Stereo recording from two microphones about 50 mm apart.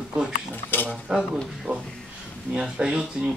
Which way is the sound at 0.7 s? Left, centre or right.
Left.